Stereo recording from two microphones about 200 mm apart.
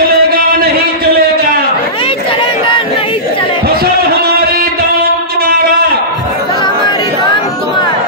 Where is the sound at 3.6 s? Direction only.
50° right (ahead or behind).